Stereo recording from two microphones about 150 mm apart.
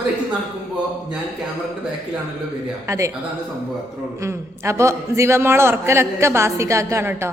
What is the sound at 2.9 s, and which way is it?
Speech, 20° right (ahead or behind).